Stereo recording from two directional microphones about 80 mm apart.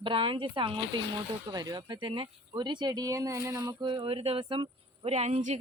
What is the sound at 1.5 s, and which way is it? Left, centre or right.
Speech, right.